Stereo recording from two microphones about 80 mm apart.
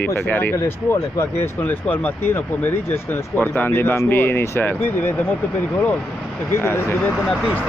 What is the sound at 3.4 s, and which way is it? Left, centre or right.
Speech, left.